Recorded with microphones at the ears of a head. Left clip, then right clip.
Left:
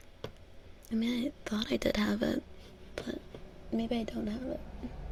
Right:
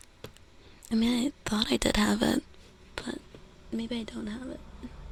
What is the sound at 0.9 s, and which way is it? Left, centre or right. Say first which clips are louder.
Speech: right 6 dB; right.